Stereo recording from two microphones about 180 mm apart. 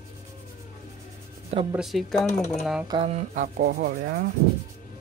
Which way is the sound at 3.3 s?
55° right (ahead or behind).